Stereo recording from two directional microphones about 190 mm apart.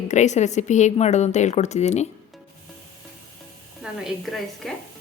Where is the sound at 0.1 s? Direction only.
40° left (ahead or behind).